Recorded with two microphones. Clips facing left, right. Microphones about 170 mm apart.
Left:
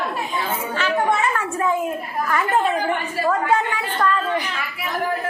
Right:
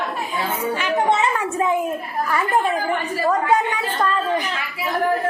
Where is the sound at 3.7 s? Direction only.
20° right (ahead or behind).